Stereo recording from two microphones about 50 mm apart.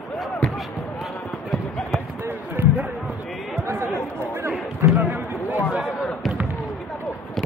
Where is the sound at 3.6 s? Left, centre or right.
Right.